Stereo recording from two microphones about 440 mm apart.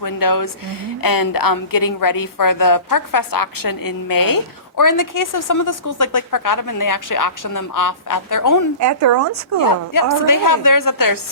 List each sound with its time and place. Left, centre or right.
0.0 s a woman's voice: left
8.8 s speech: right
9.6 s a woman's voice: left